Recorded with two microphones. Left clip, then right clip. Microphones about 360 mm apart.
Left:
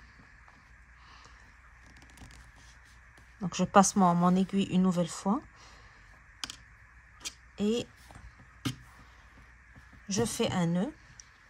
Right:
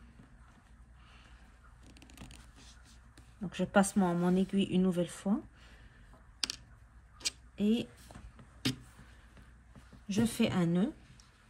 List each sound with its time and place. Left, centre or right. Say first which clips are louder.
3.3 s a sound: left 4 dB; left
3.7 s speech: left 7 dB; left
7.5 s speech: left 4 dB; left
10.0 s speech: left 3 dB; left